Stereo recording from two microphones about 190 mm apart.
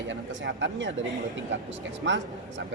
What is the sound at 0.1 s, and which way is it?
Speech, 75° right (ahead or behind).